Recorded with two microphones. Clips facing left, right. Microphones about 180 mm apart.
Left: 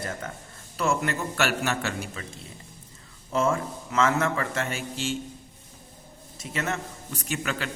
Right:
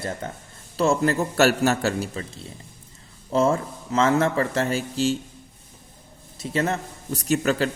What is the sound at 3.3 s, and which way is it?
A man's voice, 30° right (ahead or behind).